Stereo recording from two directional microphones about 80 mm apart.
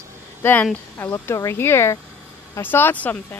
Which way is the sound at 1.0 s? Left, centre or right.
Left.